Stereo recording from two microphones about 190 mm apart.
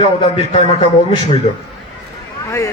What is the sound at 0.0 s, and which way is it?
A man's voice, 30° left (ahead or behind).